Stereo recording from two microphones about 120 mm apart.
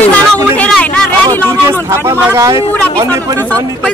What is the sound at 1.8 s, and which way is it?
Speech, 20° right (ahead or behind).